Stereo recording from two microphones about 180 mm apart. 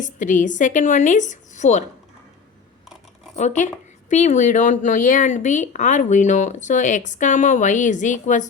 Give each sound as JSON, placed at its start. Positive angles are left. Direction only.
{"t": 0.0, "sound": "speech", "side_deg": 45}
{"t": 3.3, "sound": "speech", "side_deg": 40}